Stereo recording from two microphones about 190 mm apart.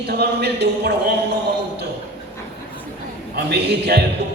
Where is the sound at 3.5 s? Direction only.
60° right (ahead or behind).